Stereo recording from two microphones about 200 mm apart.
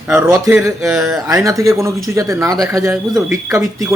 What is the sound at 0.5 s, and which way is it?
A man's voice, 15° right (ahead or behind).